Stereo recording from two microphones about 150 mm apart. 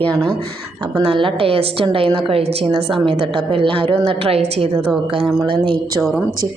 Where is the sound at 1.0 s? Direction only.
35° right (ahead or behind).